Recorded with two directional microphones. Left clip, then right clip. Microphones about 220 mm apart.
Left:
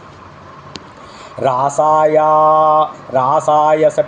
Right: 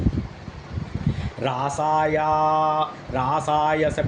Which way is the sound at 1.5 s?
35° right (ahead or behind).